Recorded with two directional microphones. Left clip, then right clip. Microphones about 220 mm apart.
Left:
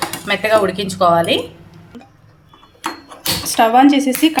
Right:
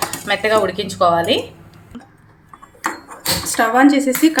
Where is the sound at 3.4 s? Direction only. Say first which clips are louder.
Left 3 dB; 30° left (ahead or behind).